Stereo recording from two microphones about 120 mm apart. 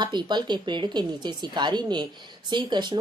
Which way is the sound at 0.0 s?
40° right (ahead or behind).